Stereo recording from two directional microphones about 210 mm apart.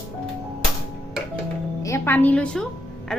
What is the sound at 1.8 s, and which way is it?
Speech, 10° left (ahead or behind).